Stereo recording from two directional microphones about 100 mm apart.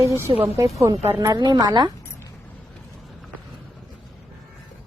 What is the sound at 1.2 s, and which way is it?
Speech, 45° right (ahead or behind).